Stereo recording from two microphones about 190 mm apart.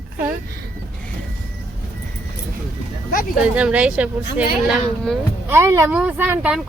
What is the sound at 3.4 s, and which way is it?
Speech, 5° right (ahead or behind).